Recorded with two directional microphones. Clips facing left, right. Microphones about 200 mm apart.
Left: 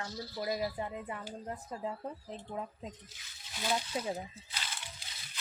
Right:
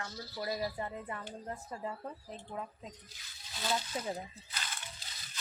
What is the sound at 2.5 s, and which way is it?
Speech, 10° left (ahead or behind).